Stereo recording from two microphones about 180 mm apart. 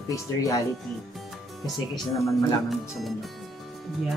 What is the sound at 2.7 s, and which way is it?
Speech, centre (ahead or behind).